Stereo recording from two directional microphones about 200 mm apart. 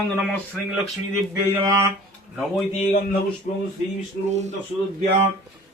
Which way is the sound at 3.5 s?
35° left (ahead or behind).